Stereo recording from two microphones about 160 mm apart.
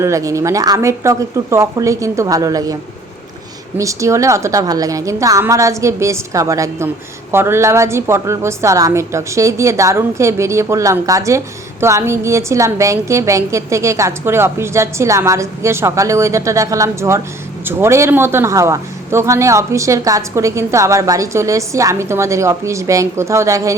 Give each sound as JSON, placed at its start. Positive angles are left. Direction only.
{"t": 0.0, "sound": "a man's voice", "side_deg": -20}
{"t": 3.8, "sound": "a woman's voice", "side_deg": -20}